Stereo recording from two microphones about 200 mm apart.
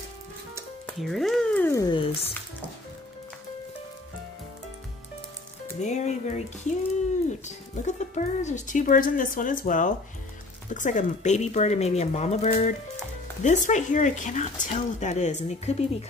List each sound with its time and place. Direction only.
0.8 s speech: centre (ahead or behind)
5.8 s speech: 35° left (ahead or behind)